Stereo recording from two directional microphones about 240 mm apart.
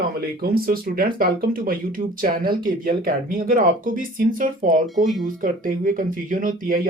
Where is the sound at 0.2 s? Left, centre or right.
Right.